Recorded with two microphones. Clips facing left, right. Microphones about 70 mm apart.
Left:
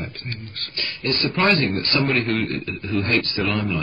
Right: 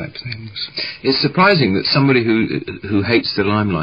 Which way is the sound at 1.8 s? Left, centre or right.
Right.